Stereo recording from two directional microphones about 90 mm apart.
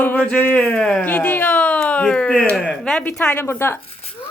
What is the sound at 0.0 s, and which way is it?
Speech, 25° left (ahead or behind).